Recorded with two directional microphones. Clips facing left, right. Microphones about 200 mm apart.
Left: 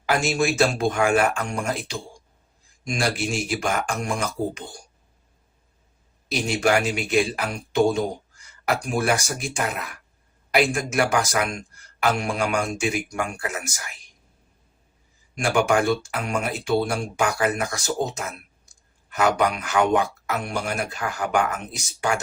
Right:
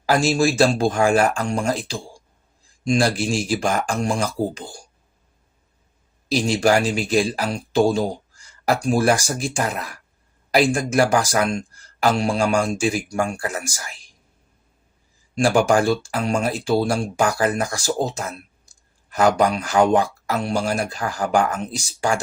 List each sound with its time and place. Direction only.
0.0 s speech: 35° right (ahead or behind)
6.2 s speech: 30° right (ahead or behind)
15.4 s speech: 30° right (ahead or behind)